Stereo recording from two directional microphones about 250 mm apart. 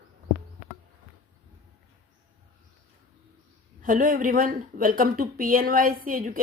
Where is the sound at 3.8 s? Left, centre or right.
Right.